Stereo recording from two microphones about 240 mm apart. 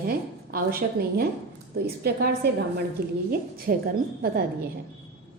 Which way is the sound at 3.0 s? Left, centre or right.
Right.